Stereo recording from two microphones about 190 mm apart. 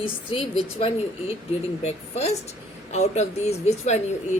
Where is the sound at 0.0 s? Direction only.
30° left (ahead or behind).